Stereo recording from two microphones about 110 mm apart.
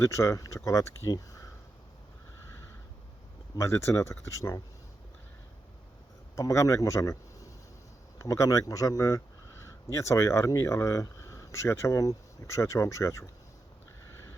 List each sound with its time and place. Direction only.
0.0 s speech: 25° left (ahead or behind)
3.5 s speech: 25° left (ahead or behind)
6.3 s speech: 25° left (ahead or behind)
8.2 s speech: 30° left (ahead or behind)